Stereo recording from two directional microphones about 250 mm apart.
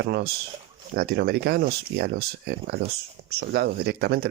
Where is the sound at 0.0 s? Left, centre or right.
Right.